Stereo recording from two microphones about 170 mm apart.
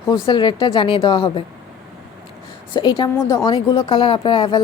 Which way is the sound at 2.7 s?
25° left (ahead or behind).